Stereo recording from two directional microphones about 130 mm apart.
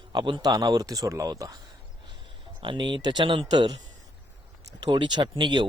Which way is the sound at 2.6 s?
35° right (ahead or behind).